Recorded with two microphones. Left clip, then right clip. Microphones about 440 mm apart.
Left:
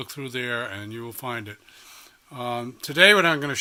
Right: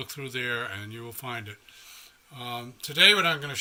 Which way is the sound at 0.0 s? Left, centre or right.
Centre.